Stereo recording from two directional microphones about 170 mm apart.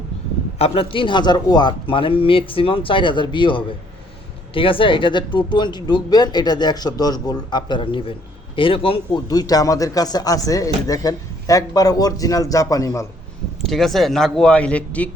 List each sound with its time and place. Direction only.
0.6 s a man's voice: 35° left (ahead or behind)
9.2 s speech: 20° left (ahead or behind)
13.6 s a man's voice: centre (ahead or behind)